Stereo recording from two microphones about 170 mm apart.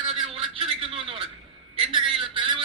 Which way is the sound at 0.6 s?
35° right (ahead or behind).